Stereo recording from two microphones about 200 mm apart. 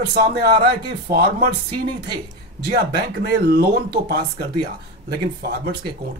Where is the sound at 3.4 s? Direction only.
55° right (ahead or behind).